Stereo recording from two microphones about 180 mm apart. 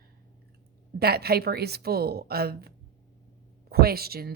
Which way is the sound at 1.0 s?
60° right (ahead or behind).